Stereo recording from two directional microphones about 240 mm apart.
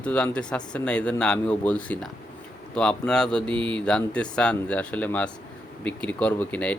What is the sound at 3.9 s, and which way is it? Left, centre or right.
Speech, centre.